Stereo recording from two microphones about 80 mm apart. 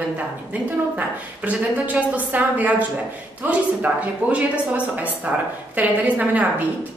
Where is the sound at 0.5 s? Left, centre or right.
Centre.